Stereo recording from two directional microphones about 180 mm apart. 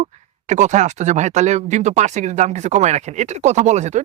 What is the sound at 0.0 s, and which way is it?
Speech, 40° right (ahead or behind).